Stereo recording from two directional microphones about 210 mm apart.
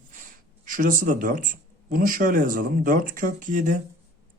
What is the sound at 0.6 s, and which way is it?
Speech, 40° right (ahead or behind).